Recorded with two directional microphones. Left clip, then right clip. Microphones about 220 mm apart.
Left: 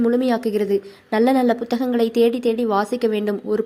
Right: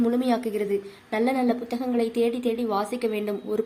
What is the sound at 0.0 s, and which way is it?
A woman's voice, 25° left (ahead or behind).